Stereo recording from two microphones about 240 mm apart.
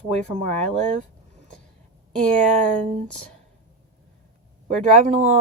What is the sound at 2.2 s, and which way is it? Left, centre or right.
Speech, right.